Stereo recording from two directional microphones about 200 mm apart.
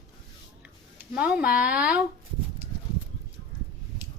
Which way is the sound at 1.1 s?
5° right (ahead or behind).